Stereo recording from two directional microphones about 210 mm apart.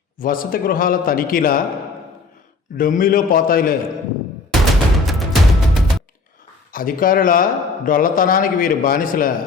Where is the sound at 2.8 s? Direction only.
40° left (ahead or behind).